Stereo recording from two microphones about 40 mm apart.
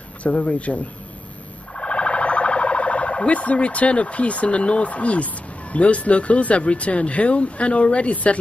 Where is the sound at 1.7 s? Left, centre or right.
Left.